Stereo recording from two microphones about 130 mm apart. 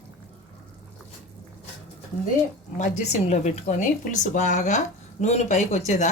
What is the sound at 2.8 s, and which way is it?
A woman's voice, 65° left (ahead or behind).